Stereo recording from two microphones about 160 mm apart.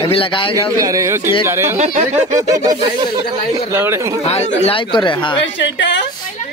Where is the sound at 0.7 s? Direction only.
20° right (ahead or behind).